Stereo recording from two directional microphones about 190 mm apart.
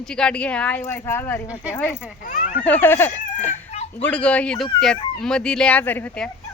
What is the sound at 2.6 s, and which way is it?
A woman's voice, 10° left (ahead or behind).